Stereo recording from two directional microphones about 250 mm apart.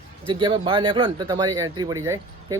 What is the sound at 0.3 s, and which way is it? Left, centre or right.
A man's voice, centre.